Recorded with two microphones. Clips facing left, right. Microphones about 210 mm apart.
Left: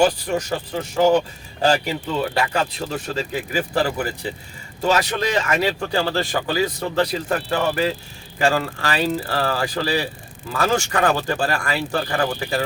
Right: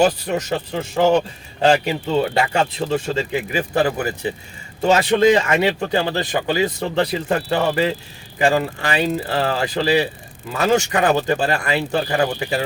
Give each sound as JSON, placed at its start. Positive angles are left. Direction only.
{"t": 0.0, "sound": "speech", "side_deg": -20}